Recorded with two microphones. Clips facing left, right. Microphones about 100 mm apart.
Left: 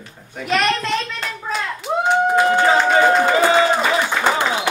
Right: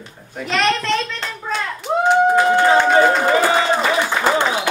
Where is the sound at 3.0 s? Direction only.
20° left (ahead or behind).